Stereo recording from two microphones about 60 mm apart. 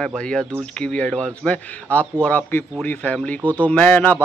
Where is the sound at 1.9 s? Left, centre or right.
Left.